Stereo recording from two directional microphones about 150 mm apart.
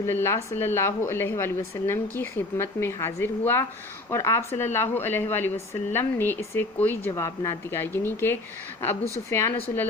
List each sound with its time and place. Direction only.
0.0 s speech: 15° left (ahead or behind)